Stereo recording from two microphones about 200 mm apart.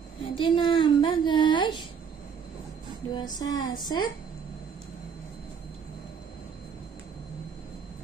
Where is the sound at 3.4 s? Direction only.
20° left (ahead or behind).